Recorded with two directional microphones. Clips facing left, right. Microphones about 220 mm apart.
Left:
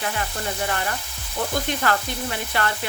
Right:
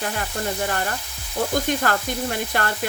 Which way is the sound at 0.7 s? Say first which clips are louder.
Right 1 dB; 40° right (ahead or behind).